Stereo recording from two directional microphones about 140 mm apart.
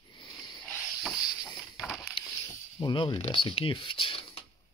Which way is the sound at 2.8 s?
35° left (ahead or behind).